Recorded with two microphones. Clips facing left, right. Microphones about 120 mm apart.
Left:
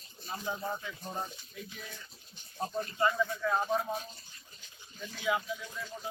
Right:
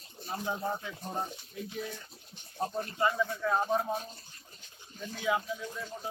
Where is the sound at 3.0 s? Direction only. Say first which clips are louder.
Even; 20° right (ahead or behind).